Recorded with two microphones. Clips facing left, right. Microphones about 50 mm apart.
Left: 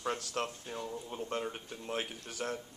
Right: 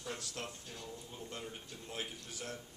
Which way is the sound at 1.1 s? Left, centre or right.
Left.